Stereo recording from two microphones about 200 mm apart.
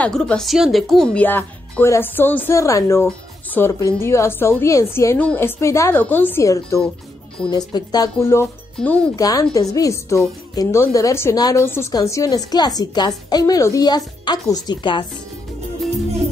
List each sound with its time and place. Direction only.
0.0 s a woman's voice: 5° left (ahead or behind)
9.2 s a woman's voice: 15° left (ahead or behind)